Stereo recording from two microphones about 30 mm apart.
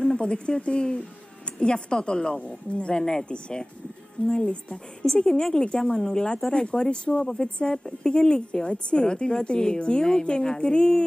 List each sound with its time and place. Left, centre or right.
0.0 s speech: left
2.3 s speech: left
3.0 s a woman's voice: left
3.3 s a woman's voice: left